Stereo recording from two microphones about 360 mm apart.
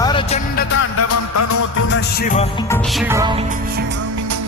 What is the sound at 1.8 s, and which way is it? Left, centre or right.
Music, left.